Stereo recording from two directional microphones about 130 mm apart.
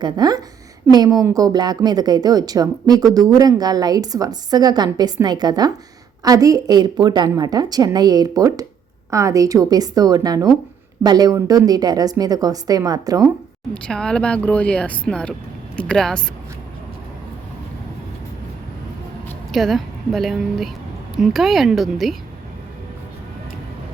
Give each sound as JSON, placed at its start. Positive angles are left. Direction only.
{"t": 0.0, "sound": "a woman's voice", "side_deg": -30}
{"t": 13.7, "sound": "speech", "side_deg": 5}
{"t": 19.5, "sound": "a woman's voice", "side_deg": 0}